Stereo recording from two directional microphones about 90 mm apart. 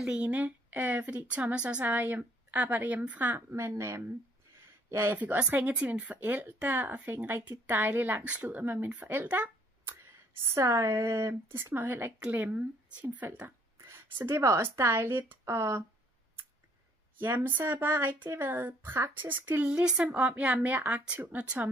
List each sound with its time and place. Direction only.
0.0 s speech: 15° right (ahead or behind)
3.5 s speech: 30° right (ahead or behind)
4.8 s a sound: 30° right (ahead or behind)
5.1 s speech: 20° right (ahead or behind)
10.5 s speech: 35° right (ahead or behind)
17.2 s speech: 25° right (ahead or behind)
19.5 s speech: 15° right (ahead or behind)